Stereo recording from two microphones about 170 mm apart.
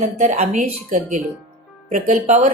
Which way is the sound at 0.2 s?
45° right (ahead or behind).